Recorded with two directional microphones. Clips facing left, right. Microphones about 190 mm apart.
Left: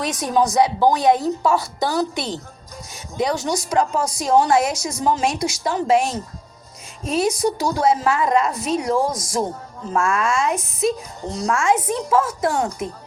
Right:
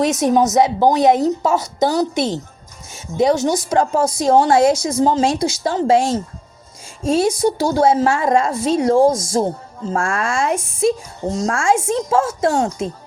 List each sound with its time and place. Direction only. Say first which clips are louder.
0.0 s a woman's voice: right 5 dB; 25° right (ahead or behind)